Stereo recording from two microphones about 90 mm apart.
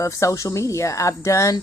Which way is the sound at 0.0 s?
35° left (ahead or behind).